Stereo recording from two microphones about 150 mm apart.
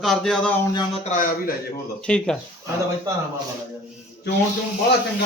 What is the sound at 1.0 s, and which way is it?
Speech, 60° left (ahead or behind).